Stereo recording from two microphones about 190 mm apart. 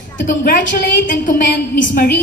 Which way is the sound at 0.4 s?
45° left (ahead or behind).